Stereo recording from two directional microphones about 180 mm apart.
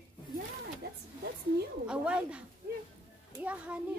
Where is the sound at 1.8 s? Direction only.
5° right (ahead or behind).